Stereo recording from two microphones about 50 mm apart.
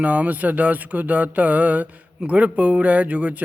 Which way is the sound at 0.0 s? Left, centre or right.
Right.